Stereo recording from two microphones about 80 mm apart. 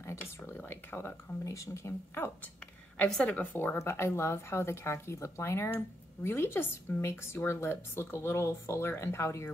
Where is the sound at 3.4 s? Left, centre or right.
Left.